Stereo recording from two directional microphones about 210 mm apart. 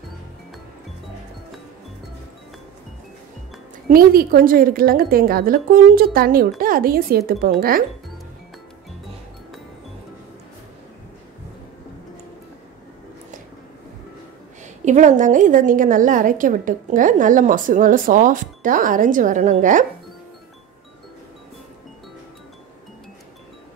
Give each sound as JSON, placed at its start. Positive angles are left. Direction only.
{"t": 3.9, "sound": "a woman's voice", "side_deg": -45}
{"t": 14.9, "sound": "a woman's voice", "side_deg": -35}